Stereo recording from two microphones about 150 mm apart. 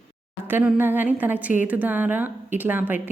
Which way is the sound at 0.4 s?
15° right (ahead or behind).